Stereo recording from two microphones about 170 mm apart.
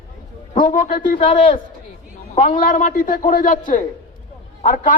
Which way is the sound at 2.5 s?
50° left (ahead or behind).